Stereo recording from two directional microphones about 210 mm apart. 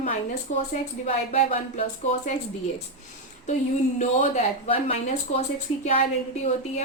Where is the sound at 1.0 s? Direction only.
30° left (ahead or behind).